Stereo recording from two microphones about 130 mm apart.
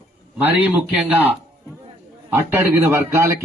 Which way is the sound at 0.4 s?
10° right (ahead or behind).